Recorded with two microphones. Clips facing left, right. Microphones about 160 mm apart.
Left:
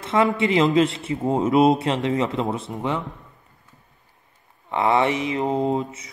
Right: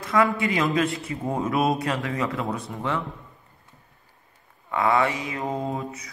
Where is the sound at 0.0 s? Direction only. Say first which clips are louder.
Left 2 dB; 25° left (ahead or behind).